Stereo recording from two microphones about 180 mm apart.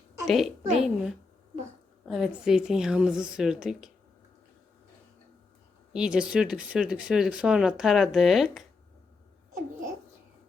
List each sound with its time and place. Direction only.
0.3 s speech: centre (ahead or behind)
5.9 s speech: 5° right (ahead or behind)